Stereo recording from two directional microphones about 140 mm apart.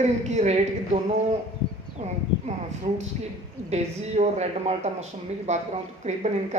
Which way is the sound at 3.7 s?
50° right (ahead or behind).